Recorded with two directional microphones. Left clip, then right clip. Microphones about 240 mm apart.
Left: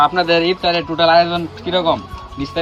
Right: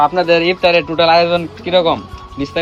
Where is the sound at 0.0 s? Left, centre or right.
Right.